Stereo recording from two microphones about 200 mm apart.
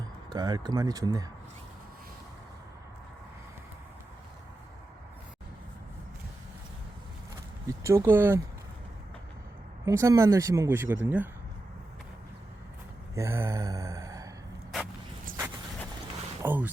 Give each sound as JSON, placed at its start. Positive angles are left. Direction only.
{"t": 0.3, "sound": "speech", "side_deg": -20}
{"t": 7.7, "sound": "speech", "side_deg": -15}
{"t": 9.8, "sound": "speech", "side_deg": -15}
{"t": 13.1, "sound": "mantra", "side_deg": -15}
{"t": 16.4, "sound": "speech", "side_deg": -10}